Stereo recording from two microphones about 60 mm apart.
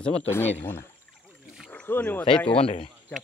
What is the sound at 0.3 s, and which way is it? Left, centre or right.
Speech, left.